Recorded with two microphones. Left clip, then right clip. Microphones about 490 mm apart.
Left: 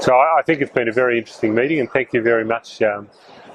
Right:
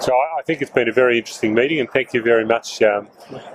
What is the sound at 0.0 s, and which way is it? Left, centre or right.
Speech, left.